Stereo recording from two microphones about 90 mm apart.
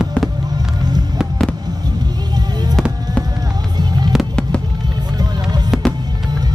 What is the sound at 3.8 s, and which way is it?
Music, 50° right (ahead or behind).